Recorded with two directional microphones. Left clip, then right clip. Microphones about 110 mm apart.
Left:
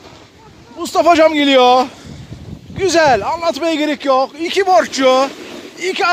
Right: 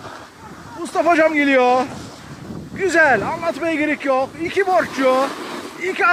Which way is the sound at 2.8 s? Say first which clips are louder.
Left 3 dB; 35° left (ahead or behind).